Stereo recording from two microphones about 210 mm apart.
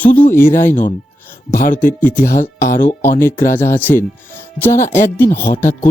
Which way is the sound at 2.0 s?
10° left (ahead or behind).